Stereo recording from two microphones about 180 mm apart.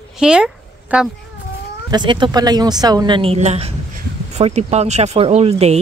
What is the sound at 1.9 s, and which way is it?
Speech, 25° right (ahead or behind).